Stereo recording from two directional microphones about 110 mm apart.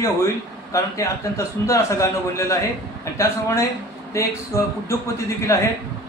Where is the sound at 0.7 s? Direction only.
30° left (ahead or behind).